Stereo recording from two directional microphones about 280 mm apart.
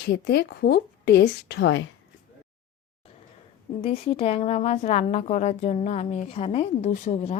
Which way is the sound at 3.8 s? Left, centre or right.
Centre.